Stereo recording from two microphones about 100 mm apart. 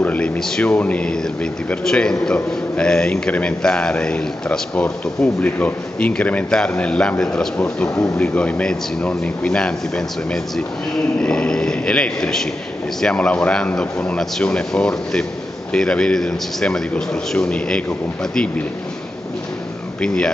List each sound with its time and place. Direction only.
0.0 s a man's voice: 15° left (ahead or behind)